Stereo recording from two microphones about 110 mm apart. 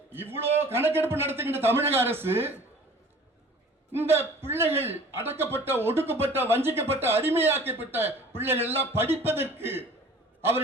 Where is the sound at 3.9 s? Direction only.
20° right (ahead or behind).